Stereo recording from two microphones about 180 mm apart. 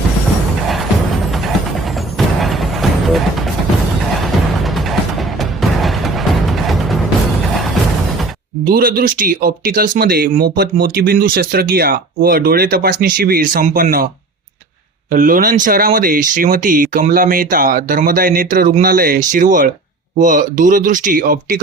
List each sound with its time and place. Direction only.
2.1 s a sound: centre (ahead or behind)
4.6 s music: centre (ahead or behind)
8.6 s speech: 55° right (ahead or behind)
15.1 s speech: 50° right (ahead or behind)